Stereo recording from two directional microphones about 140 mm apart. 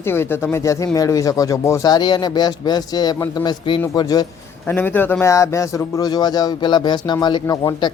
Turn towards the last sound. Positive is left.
turn(degrees=30)  # may be behind; listen again after turning